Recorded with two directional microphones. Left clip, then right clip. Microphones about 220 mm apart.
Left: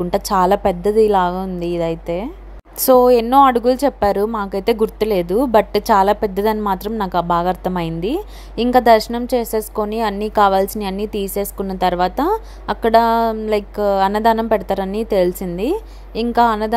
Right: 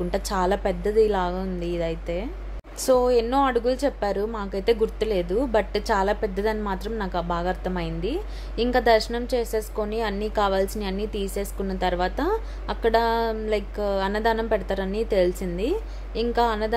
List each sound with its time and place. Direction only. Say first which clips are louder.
0.1 s a woman's voice: left 10 dB; 25° left (ahead or behind)